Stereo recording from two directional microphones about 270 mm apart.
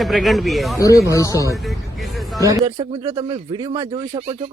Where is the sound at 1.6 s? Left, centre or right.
Centre.